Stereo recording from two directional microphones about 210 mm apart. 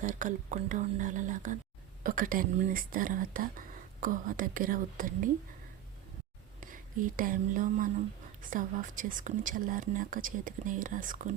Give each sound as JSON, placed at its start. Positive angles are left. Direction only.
{"t": 0.0, "sound": "speech", "side_deg": -35}
{"t": 6.6, "sound": "speech", "side_deg": -40}